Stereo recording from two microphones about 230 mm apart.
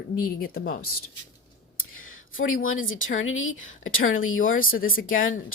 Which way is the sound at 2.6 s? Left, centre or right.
Left.